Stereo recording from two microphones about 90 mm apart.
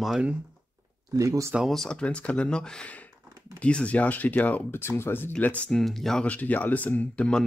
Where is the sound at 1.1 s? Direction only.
40° right (ahead or behind).